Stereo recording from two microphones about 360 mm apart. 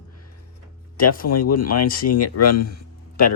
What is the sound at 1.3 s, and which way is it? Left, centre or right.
Speech, left.